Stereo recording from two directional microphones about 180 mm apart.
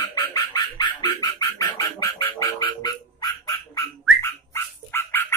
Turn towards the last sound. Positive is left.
turn(degrees=10)  # may be behind; listen again after turning